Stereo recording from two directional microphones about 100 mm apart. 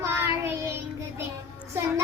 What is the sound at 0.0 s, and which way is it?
Child singing, 25° right (ahead or behind).